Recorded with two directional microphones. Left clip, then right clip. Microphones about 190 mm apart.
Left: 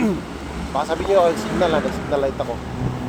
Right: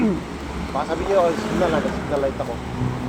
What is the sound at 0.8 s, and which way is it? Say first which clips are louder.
Speech: left 2 dB; 35° left (ahead or behind).